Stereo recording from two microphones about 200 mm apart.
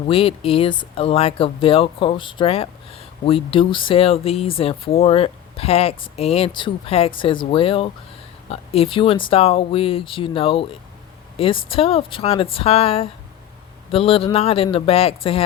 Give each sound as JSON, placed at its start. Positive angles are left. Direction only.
{"t": 0.1, "sound": "speech", "side_deg": 30}